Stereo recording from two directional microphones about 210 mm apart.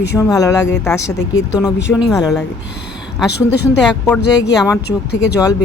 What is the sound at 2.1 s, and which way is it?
Speech, 15° left (ahead or behind).